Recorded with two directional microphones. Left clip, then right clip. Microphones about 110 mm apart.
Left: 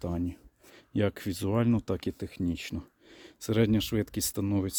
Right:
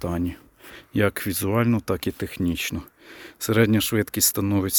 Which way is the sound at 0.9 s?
25° left (ahead or behind).